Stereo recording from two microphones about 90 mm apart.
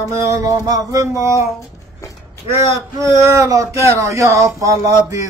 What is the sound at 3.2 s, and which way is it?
Speech, 35° right (ahead or behind).